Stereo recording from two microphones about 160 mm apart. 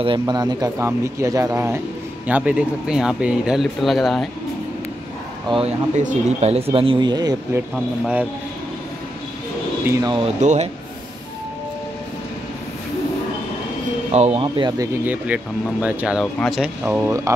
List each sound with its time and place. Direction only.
0.0 s speech: 30° right (ahead or behind); by 4.3 s centre (ahead or behind)
5.5 s speech: 30° right (ahead or behind)
6.0 s speech: 40° right (ahead or behind); by 7.6 s 25° right (ahead or behind)
7.7 s speech: 5° right (ahead or behind)
9.8 s speech: 20° right (ahead or behind)
10.2 s speech: 45° right (ahead or behind)
14.1 s speech: 40° right (ahead or behind)
15.0 s speech: 10° right (ahead or behind)
16.8 s speech: 15° right (ahead or behind)